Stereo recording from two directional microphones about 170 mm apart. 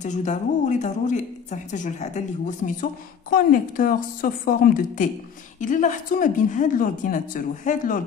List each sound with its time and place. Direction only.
0.0 s a woman's voice: 45° left (ahead or behind)